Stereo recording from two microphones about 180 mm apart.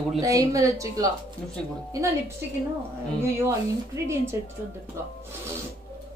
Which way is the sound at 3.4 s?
15° right (ahead or behind).